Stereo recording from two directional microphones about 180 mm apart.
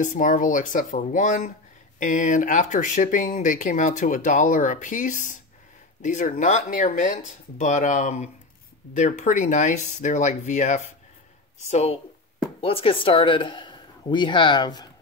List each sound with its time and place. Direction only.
0.0 s speech: 45° left (ahead or behind); by 14.9 s 25° left (ahead or behind)